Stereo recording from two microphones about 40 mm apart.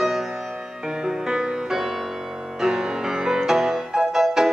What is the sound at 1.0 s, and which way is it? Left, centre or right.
Music, centre.